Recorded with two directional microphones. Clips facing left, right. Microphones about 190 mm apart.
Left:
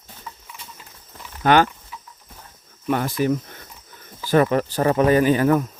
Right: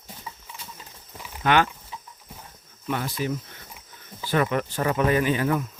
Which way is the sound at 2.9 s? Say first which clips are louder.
Left 7 dB; 50° left (ahead or behind).